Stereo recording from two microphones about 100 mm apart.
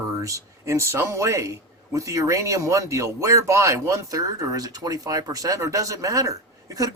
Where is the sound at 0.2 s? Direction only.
35° right (ahead or behind).